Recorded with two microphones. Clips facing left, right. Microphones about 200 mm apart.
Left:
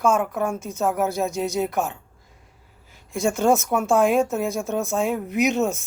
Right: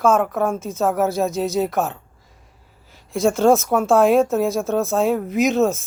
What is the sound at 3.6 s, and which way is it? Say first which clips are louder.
Speech: right 4 dB; 55° right (ahead or behind).